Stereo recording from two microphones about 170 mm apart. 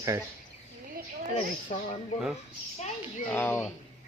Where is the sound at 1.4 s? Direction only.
40° left (ahead or behind).